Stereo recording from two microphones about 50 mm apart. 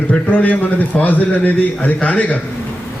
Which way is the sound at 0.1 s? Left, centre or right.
Left.